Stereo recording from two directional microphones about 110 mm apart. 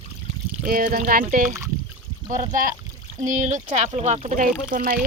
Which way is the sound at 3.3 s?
90° right.